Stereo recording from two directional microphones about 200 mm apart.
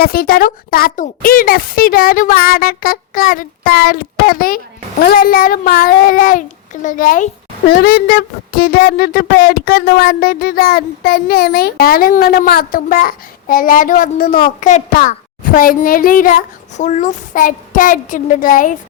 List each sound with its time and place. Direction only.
0.0 s a child's voice: 50° left (ahead or behind)